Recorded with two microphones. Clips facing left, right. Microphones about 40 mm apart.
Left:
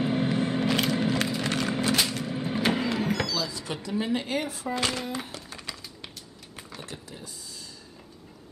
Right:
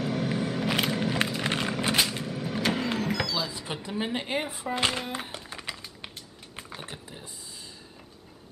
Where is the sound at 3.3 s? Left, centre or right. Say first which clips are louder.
Even; right.